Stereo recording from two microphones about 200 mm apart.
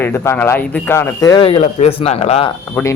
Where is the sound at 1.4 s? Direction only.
30° left (ahead or behind).